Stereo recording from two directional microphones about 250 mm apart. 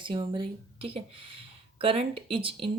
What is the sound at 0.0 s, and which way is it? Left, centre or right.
A woman's voice, centre.